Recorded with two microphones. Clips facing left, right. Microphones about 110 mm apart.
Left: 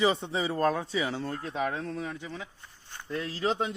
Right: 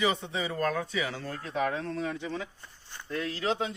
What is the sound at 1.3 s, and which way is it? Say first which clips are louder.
Speech: right 1 dB; 15° left (ahead or behind).